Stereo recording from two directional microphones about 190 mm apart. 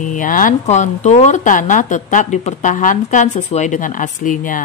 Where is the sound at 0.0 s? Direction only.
45° left (ahead or behind).